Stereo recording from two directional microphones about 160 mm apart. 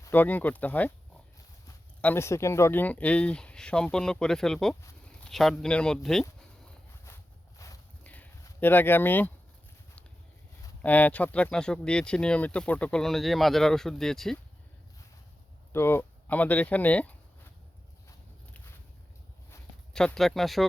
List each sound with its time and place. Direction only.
0.0 s speech: 10° left (ahead or behind)
2.0 s speech: 15° left (ahead or behind)
7.6 s walk: 20° left (ahead or behind)
8.0 s a sound: 10° left (ahead or behind)
10.8 s speech: 10° left (ahead or behind)
15.7 s speech: 15° left (ahead or behind)
19.9 s speech: 5° left (ahead or behind)